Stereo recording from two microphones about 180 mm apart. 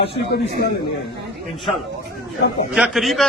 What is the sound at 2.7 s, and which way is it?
Speech, 5° right (ahead or behind).